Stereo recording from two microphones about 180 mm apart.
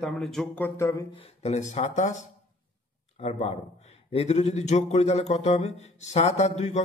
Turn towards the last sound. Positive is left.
turn(degrees=40)  # may be behind; listen again after turning